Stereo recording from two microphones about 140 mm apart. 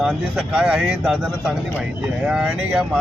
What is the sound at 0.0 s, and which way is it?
Speech, 5° right (ahead or behind).